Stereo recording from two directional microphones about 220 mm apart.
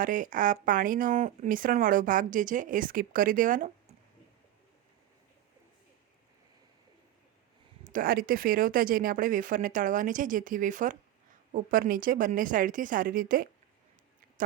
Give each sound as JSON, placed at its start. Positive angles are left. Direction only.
{"t": 0.0, "sound": "speech", "side_deg": -35}
{"t": 7.9, "sound": "speech", "side_deg": -40}